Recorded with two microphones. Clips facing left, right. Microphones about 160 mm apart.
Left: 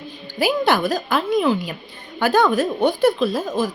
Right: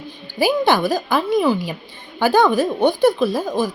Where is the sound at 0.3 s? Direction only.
Centre (ahead or behind).